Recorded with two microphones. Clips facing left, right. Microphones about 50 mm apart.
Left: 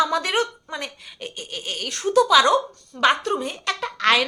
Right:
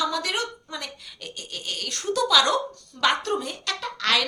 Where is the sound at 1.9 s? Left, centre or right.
Centre.